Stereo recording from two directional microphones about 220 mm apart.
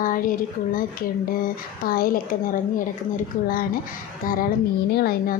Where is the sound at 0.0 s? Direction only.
40° left (ahead or behind).